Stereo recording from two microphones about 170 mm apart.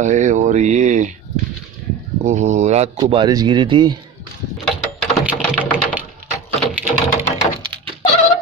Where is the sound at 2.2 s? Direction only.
45° right (ahead or behind).